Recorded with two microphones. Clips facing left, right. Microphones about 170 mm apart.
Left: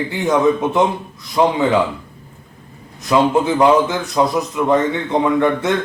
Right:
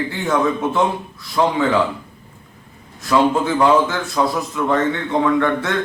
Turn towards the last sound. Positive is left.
turn(degrees=20)  # may be behind; listen again after turning